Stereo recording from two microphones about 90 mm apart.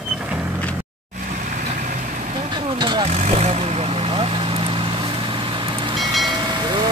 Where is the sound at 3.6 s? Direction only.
90° right; by 6.0 s 65° right (ahead or behind).